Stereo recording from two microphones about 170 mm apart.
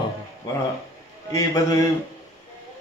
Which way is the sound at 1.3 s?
20° left (ahead or behind).